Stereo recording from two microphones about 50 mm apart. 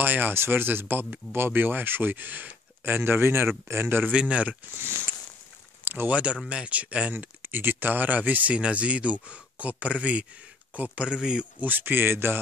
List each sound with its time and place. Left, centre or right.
0.0 s speech: right
2.8 s speech: right
4.1 s speech: right
4.7 s speech: right
5.9 s speech: right
6.5 s speech: right
7.4 s speech: right
11.1 s speech: centre
11.6 s speech: right